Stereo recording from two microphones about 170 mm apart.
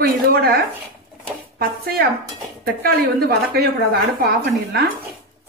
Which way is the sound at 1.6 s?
65° right (ahead or behind).